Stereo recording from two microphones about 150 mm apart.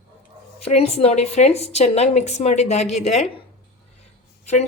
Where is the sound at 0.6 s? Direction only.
45° left (ahead or behind).